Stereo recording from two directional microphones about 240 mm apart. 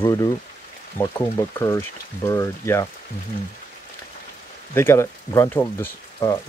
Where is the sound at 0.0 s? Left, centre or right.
Centre.